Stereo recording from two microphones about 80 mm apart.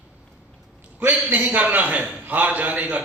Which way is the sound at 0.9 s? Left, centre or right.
Right.